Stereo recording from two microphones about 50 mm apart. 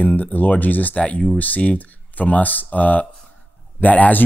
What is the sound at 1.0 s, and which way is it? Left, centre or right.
Speech, left.